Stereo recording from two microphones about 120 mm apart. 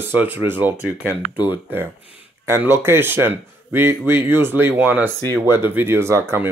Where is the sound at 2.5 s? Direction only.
20° right (ahead or behind).